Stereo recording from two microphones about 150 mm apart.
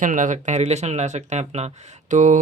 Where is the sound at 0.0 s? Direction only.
60° right (ahead or behind).